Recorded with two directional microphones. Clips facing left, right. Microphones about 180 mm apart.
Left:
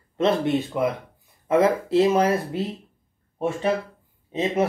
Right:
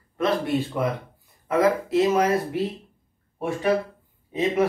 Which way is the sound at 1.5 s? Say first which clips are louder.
Left 2 dB; 30° left (ahead or behind).